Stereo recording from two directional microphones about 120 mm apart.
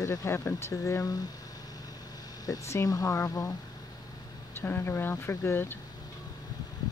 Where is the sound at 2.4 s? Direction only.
30° left (ahead or behind).